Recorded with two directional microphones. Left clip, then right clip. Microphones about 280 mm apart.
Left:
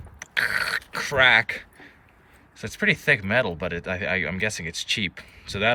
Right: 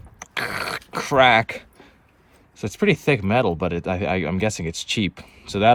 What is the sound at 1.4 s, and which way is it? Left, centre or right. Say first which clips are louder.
Speech: even; centre.